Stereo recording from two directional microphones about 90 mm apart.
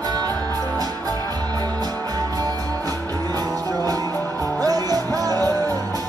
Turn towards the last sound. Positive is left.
turn(degrees=-45)  # may be behind; listen again after turning